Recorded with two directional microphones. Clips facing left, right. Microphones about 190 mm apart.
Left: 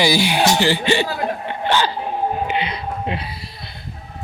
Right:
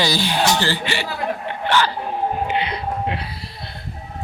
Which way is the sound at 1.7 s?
20° left (ahead or behind).